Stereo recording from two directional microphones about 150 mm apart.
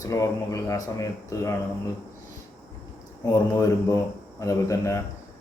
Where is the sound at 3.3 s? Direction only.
20° left (ahead or behind).